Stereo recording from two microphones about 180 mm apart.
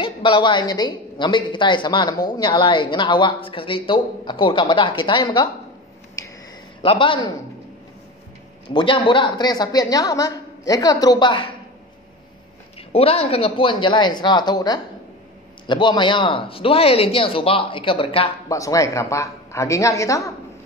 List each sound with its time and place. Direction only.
0.0 s a woman's voice: 25° left (ahead or behind)
6.8 s a woman's voice: 30° left (ahead or behind)
8.6 s a woman's voice: 25° left (ahead or behind)
12.7 s a woman's voice: 30° left (ahead or behind)
18.5 s a woman's voice: 20° left (ahead or behind)